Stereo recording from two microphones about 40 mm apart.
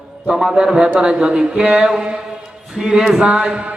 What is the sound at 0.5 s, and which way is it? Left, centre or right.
Speech, right.